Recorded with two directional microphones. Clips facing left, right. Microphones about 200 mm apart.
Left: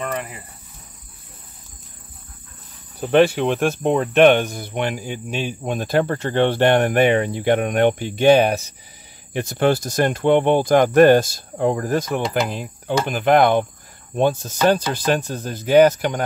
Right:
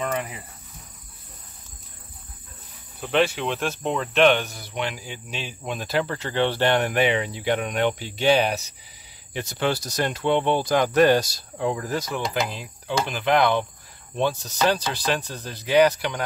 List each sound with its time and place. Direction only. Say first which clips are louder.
3.0 s cricket: left 7 dB; 50° left (ahead or behind)